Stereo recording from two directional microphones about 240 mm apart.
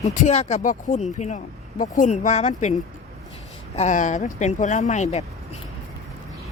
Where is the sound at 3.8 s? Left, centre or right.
Left.